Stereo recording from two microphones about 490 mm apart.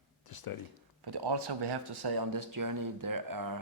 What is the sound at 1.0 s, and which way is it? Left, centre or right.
Speech, right.